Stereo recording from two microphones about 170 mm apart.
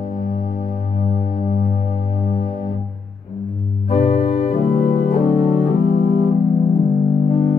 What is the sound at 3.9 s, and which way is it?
Organ, 45° left (ahead or behind).